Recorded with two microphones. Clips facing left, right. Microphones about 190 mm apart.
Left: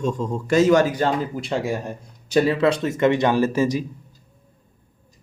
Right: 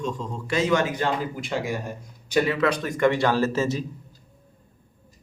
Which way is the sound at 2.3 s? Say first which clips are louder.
Left 4 dB; 30° left (ahead or behind).